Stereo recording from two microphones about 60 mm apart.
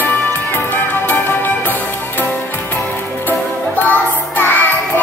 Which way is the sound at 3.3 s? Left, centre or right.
Left.